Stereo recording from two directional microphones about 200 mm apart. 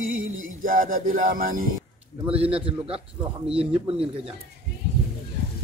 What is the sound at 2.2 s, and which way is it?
A man's voice, 30° right (ahead or behind).